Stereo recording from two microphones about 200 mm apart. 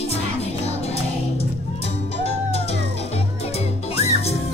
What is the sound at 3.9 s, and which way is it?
Music, 30° left (ahead or behind).